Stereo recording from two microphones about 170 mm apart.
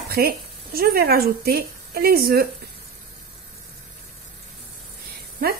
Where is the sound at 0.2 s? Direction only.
65° right (ahead or behind).